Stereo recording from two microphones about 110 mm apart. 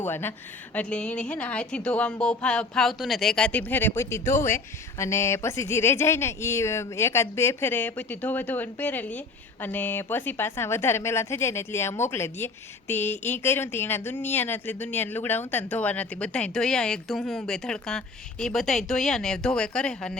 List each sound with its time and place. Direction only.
0.0 s a woman's voice: 20° left (ahead or behind)